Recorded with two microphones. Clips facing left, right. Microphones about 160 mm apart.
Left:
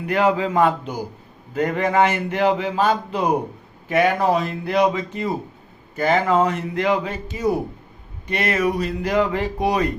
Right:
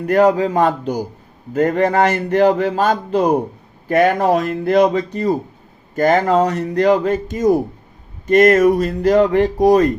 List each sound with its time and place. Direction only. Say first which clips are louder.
0.0 s a man's voice: right 6 dB; 45° right (ahead or behind)